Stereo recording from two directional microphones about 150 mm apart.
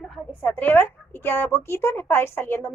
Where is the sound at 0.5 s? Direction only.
10° left (ahead or behind).